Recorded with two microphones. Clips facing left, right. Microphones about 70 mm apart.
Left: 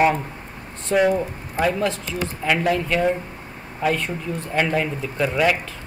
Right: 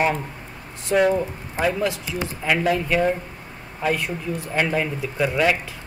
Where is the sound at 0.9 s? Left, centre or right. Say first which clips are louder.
Even; centre.